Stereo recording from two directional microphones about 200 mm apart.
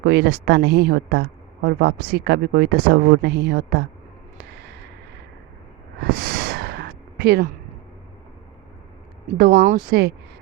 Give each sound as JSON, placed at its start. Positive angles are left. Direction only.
{"t": 0.0, "sound": "speech", "side_deg": -55}
{"t": 6.0, "sound": "a sound", "side_deg": -45}
{"t": 9.5, "sound": "speech", "side_deg": -35}